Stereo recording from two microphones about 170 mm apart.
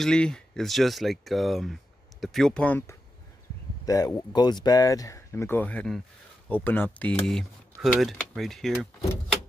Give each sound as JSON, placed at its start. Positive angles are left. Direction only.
{"t": 0.0, "sound": "speech", "side_deg": 5}
{"t": 3.8, "sound": "speech", "side_deg": 20}